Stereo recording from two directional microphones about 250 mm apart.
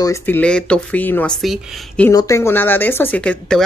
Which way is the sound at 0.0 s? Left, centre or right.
Centre.